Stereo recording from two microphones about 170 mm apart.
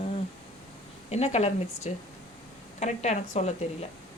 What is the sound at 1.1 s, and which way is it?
A woman's voice, 40° left (ahead or behind).